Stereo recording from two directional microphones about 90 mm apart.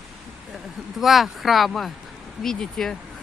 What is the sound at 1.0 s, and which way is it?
Speech, centre (ahead or behind).